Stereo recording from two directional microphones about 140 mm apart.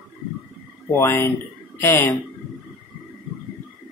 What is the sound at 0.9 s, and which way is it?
Speech, 15° left (ahead or behind).